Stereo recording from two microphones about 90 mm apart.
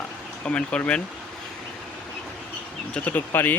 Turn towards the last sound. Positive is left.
turn(degrees=20)  # may be behind; listen again after turning